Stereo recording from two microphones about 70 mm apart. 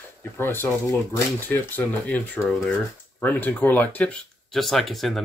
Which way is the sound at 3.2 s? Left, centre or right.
Left.